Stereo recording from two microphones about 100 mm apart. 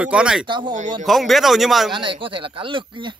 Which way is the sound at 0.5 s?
50° right (ahead or behind).